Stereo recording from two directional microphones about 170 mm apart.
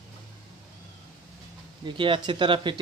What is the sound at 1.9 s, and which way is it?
Speech, 30° right (ahead or behind).